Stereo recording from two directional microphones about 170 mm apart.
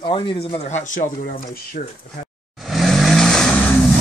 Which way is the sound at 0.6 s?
45° left (ahead or behind).